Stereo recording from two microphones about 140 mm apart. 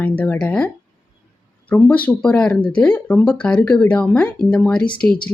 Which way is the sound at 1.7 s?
10° left (ahead or behind).